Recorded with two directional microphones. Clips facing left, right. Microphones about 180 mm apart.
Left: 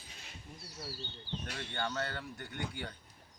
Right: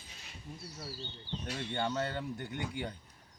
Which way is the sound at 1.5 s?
25° right (ahead or behind).